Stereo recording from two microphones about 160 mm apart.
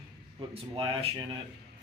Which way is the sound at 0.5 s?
30° right (ahead or behind).